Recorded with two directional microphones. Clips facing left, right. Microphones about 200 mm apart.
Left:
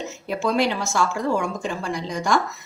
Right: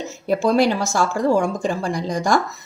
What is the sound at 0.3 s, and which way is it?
Speech, 40° right (ahead or behind).